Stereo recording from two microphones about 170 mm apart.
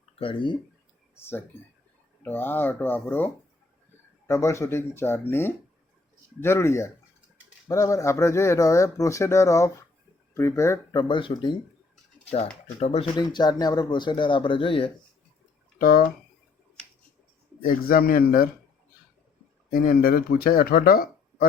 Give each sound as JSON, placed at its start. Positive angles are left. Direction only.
{"t": 0.2, "sound": "speech", "side_deg": 30}
{"t": 1.1, "sound": "speech", "side_deg": 15}
{"t": 11.1, "sound": "speech", "side_deg": 30}
{"t": 12.8, "sound": "speech", "side_deg": 35}
{"t": 13.1, "sound": "speech", "side_deg": 25}
{"t": 15.8, "sound": "speech", "side_deg": 55}
{"t": 17.6, "sound": "speech", "side_deg": 55}
{"t": 19.7, "sound": "speech", "side_deg": 60}